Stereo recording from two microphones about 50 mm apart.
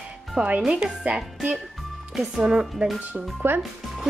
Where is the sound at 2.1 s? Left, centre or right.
Centre.